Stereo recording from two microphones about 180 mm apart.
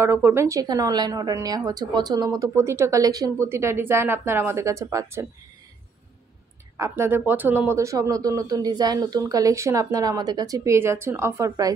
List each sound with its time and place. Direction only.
0.0 s a woman's voice: 15° right (ahead or behind)
6.8 s a woman's voice: 15° right (ahead or behind)